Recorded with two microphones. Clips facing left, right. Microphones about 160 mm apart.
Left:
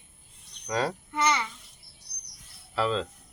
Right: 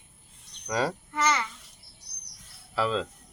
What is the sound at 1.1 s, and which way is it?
Speech, 10° left (ahead or behind).